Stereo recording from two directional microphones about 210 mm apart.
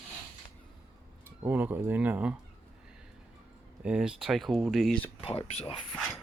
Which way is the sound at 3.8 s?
5° right (ahead or behind).